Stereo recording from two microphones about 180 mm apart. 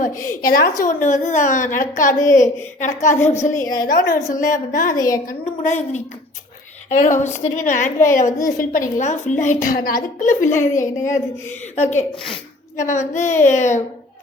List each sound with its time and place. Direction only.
0.4 s a woman's voice: 50° left (ahead or behind)